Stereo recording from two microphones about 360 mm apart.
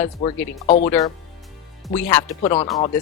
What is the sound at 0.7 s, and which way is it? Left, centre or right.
Speech, centre.